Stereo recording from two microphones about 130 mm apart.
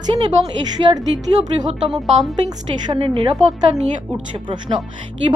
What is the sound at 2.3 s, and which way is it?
A woman's voice, 35° right (ahead or behind).